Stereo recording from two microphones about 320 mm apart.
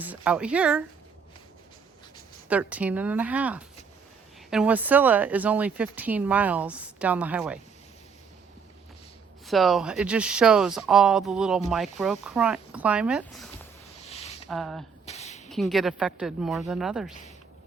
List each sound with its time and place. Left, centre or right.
0.0 s speech: centre
2.5 s speech: centre
9.5 s speech: centre
14.1 s a sound: centre
14.4 s speech: centre
15.0 s a sound: centre
15.4 s speech: centre